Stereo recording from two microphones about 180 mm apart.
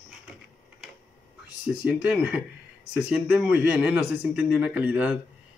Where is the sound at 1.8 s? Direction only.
5° right (ahead or behind).